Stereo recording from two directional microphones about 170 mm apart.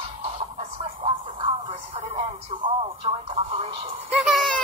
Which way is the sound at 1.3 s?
30° right (ahead or behind).